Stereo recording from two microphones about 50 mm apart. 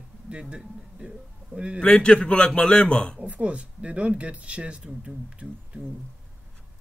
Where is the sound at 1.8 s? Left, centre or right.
Left.